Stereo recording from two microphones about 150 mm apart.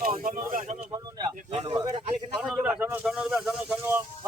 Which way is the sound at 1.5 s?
40° right (ahead or behind).